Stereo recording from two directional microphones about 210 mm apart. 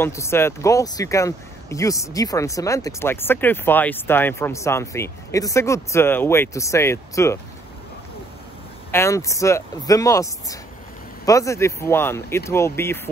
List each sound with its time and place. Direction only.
0.0 s speech: 10° left (ahead or behind)
8.9 s speech: 15° left (ahead or behind)